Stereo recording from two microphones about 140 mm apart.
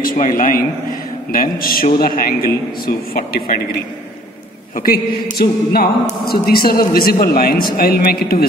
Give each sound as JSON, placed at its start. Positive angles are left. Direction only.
{"t": 0.0, "sound": "a man's voice", "side_deg": 80}
{"t": 4.7, "sound": "a man's voice", "side_deg": 90}